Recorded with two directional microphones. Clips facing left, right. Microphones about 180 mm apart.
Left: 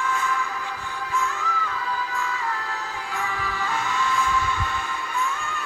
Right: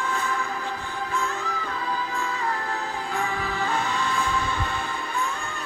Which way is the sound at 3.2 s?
45° right (ahead or behind).